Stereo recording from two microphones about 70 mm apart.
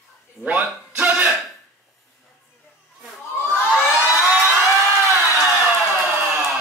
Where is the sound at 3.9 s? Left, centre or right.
Centre.